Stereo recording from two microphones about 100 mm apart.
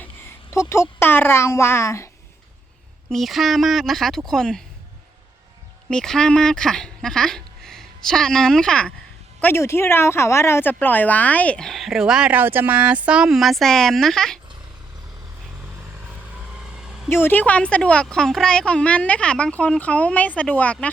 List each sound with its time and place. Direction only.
0.0 s a sound: 25° left (ahead or behind)
3.1 s speech: centre (ahead or behind)
5.9 s speech: 5° left (ahead or behind)
9.4 s speech: 25° left (ahead or behind); by 14.3 s 5° left (ahead or behind)
16.6 s vehicle: 5° right (ahead or behind)
17.1 s speech: 20° left (ahead or behind)